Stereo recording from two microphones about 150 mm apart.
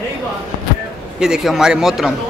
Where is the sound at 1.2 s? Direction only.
5° right (ahead or behind).